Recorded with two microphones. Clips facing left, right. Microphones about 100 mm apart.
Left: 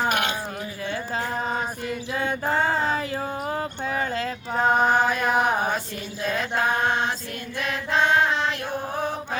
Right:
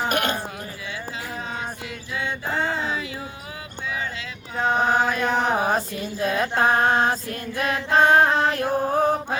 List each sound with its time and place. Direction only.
0.1 s a sound: 45° right (ahead or behind)
2.7 s a sound: 45° left (ahead or behind)
4.6 s mantra: 5° left (ahead or behind)
5.0 s chant: 5° left (ahead or behind)
5.6 s mantra: 40° right (ahead or behind)
7.6 s music: 45° right (ahead or behind)